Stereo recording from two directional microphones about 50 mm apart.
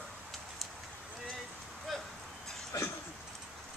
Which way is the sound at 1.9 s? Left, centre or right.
Centre.